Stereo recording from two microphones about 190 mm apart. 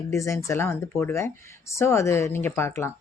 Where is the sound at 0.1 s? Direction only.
15° left (ahead or behind).